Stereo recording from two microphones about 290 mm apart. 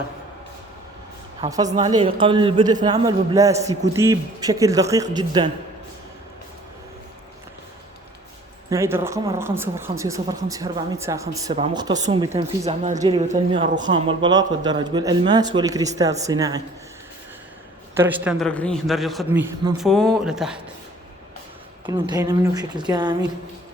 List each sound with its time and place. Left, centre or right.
1.4 s speech: centre
8.7 s speech: centre
17.9 s a man's voice: centre
21.8 s speech: centre